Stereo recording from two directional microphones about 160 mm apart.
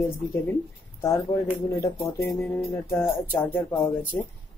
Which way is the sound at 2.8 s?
15° left (ahead or behind).